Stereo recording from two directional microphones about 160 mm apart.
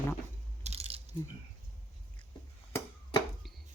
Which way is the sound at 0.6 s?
40° right (ahead or behind).